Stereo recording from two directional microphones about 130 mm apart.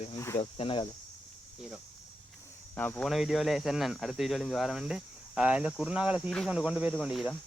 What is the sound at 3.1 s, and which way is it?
Speech, centre (ahead or behind).